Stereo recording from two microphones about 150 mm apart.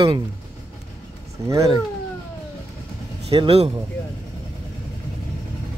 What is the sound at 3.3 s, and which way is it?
Speech, 40° right (ahead or behind).